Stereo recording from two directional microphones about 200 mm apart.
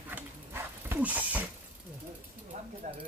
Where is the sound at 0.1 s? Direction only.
10° right (ahead or behind).